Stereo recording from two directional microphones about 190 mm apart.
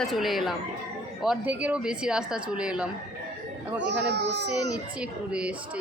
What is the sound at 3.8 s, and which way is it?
Speech, 65° right (ahead or behind).